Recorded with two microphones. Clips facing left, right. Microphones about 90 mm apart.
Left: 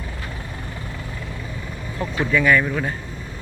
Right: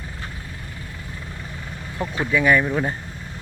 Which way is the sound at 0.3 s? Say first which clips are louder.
Left 4 dB; 75° left (ahead or behind).